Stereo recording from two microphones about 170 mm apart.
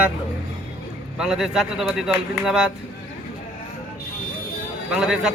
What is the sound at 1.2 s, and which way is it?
Speech, 5° right (ahead or behind).